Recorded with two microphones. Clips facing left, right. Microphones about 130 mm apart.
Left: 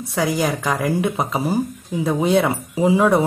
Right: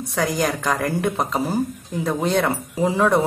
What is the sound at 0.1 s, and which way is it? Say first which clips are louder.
Speech: left 2 dB; 5° left (ahead or behind).